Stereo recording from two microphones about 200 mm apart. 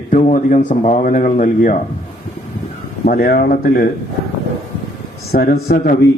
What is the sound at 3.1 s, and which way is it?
Speech, 50° left (ahead or behind).